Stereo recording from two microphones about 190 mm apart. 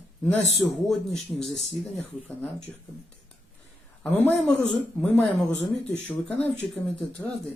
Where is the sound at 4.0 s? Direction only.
10° left (ahead or behind).